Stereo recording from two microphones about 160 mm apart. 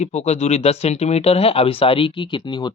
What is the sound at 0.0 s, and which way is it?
Speech, 45° left (ahead or behind).